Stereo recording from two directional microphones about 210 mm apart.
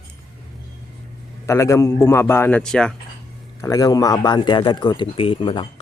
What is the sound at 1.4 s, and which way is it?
Speech, 15° left (ahead or behind).